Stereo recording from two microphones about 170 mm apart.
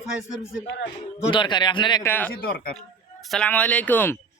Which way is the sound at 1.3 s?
25° left (ahead or behind).